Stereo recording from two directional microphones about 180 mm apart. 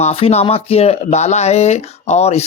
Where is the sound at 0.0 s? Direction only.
35° left (ahead or behind).